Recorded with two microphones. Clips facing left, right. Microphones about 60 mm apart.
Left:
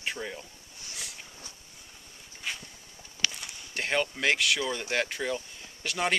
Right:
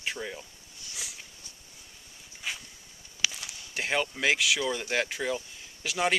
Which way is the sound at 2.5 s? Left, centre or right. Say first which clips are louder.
Even; centre.